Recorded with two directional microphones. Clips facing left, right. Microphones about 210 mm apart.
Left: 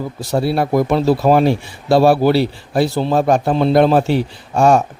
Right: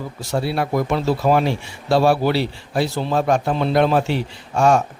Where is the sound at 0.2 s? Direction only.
35° left (ahead or behind).